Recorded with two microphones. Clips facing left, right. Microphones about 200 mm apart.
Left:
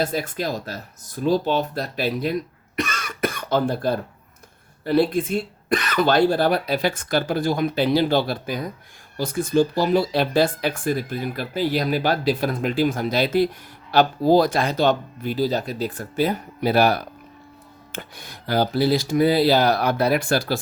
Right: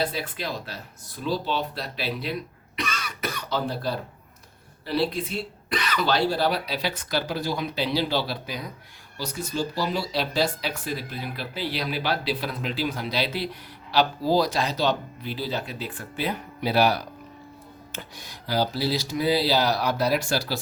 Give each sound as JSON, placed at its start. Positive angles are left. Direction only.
{"t": 0.0, "sound": "speech", "side_deg": 45}